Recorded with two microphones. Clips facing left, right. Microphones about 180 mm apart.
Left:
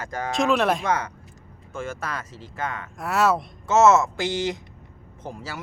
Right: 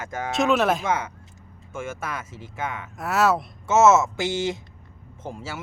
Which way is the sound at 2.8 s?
Centre (ahead or behind).